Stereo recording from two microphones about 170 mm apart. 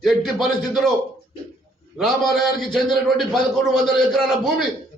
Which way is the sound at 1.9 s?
Centre (ahead or behind).